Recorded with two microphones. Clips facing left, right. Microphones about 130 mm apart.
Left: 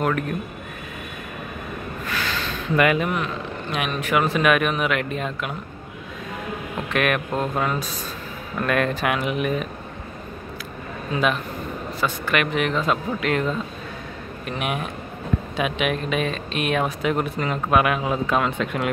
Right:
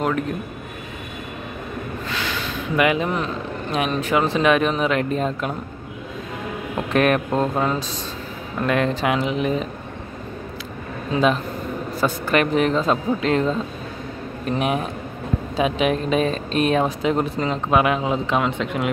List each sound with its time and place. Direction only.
2.7 s speech: 15° right (ahead or behind)
3.0 s speech: 30° right (ahead or behind)
6.9 s speech: 35° right (ahead or behind)
11.1 s speech: 30° right (ahead or behind)